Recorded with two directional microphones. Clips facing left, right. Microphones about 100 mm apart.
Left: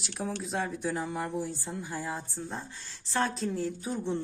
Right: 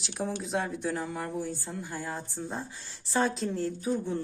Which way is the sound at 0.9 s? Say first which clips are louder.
Left 1 dB; 10° left (ahead or behind).